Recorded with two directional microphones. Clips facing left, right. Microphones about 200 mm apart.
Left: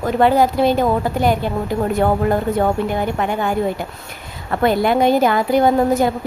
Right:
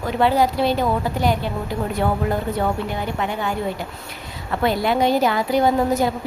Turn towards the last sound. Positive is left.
turn(degrees=55)  # may be behind; listen again after turning